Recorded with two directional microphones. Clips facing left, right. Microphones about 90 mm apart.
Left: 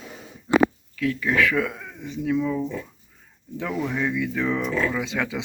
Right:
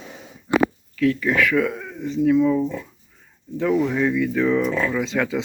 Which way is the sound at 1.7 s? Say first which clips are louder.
Right 6 dB; 5° right (ahead or behind).